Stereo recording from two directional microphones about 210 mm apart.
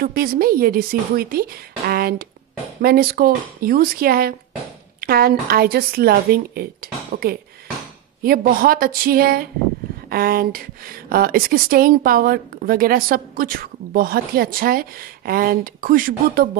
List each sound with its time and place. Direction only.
0.0 s speech: 45° right (ahead or behind)
8.2 s speech: 45° right (ahead or behind)